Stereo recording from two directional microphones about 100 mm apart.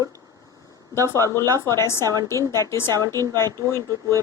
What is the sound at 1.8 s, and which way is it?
Speech, 25° left (ahead or behind).